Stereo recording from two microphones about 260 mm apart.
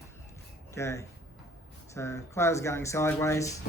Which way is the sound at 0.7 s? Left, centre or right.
Centre.